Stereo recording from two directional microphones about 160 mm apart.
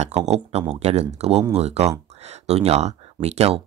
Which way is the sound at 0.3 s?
40° right (ahead or behind).